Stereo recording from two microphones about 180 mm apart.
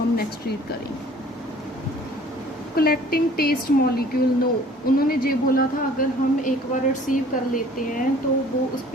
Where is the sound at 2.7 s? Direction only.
55° left (ahead or behind).